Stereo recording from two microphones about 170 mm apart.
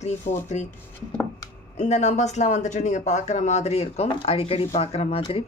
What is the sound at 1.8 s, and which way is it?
Speech, 40° left (ahead or behind).